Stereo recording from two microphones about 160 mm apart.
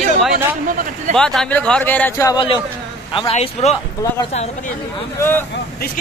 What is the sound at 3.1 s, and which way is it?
Speech, 30° left (ahead or behind).